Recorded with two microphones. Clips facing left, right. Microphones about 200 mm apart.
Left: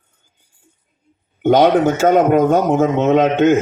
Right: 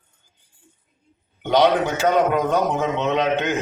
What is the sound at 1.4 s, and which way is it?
A man's voice, 45° left (ahead or behind).